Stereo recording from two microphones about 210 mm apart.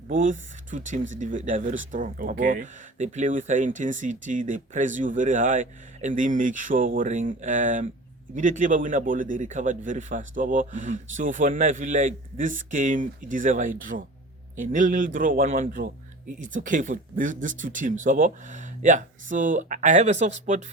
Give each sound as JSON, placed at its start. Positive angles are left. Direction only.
{"t": 0.1, "sound": "speech", "side_deg": -40}